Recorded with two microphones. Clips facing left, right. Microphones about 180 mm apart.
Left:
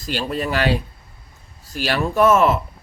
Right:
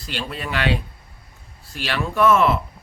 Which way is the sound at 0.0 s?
40° left (ahead or behind).